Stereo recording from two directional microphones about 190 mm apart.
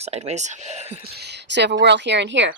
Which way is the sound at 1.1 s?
60° right (ahead or behind).